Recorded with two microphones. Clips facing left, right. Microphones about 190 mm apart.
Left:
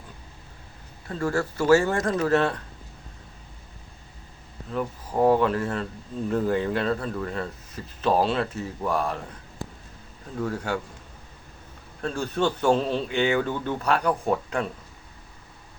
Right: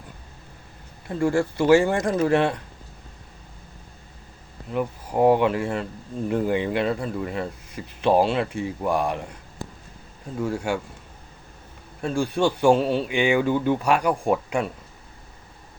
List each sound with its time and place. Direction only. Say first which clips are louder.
1.0 s speech: right 4 dB; 15° right (ahead or behind)
4.7 s speech: right 2 dB; 10° right (ahead or behind)
10.4 s speech: right 3 dB; 10° right (ahead or behind)
12.0 s speech: right 3 dB; 10° right (ahead or behind)